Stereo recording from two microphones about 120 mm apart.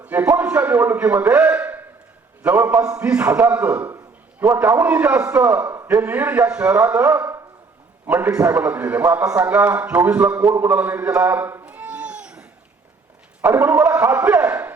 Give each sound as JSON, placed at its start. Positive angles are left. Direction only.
{"t": 0.0, "sound": "a man's voice", "side_deg": -10}
{"t": 10.5, "sound": "cat", "side_deg": -15}
{"t": 13.5, "sound": "a man's voice", "side_deg": -15}